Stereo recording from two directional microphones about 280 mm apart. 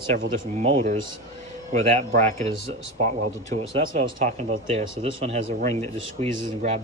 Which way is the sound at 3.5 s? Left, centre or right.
Right.